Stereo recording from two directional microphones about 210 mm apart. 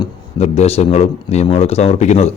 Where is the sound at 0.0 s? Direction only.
30° left (ahead or behind).